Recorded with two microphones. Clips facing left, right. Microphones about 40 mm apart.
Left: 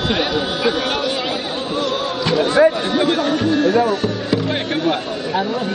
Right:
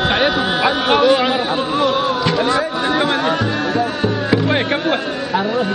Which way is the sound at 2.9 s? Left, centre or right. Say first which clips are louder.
Right 1 dB; centre.